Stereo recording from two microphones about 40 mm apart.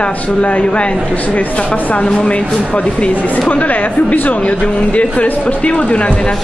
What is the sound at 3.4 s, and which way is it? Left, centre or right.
A woman's voice, left.